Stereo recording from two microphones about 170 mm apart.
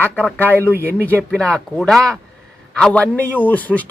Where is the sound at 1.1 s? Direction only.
5° left (ahead or behind).